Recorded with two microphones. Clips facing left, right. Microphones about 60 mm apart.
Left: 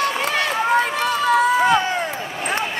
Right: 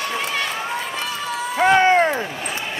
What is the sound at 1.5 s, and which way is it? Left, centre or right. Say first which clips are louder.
Run: right 3 dB; right.